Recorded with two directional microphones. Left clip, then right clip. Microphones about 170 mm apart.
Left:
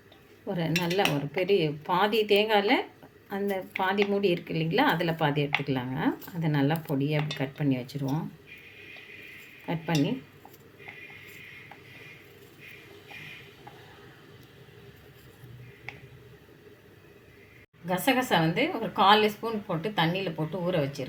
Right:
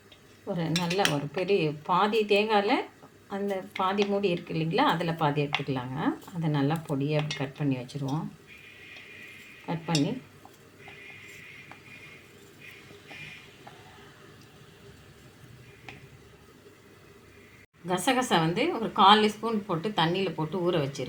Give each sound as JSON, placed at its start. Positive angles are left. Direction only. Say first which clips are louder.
{"t": 0.4, "sound": "speech", "louder": "left 1 dB", "side_deg": 25}
{"t": 9.6, "sound": "speech", "louder": "even", "side_deg": 20}
{"t": 17.8, "sound": "a woman's voice", "louder": "even", "side_deg": -5}